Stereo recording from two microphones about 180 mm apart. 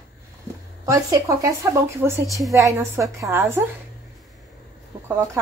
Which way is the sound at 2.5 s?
15° right (ahead or behind).